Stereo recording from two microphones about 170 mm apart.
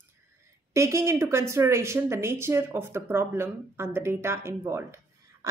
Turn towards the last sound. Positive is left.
turn(degrees=-15)  # may be behind; listen again after turning